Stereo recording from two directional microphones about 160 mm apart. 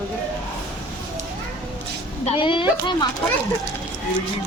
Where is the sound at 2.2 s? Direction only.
30° left (ahead or behind).